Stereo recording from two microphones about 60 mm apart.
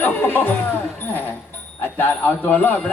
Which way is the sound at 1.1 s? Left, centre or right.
Left.